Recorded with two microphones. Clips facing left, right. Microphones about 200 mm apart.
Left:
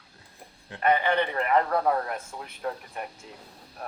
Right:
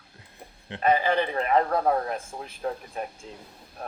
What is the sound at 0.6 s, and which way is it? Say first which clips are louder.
Speech: right 1 dB; 25° right (ahead or behind).